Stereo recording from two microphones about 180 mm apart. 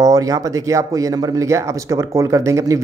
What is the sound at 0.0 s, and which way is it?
Speech, 20° right (ahead or behind).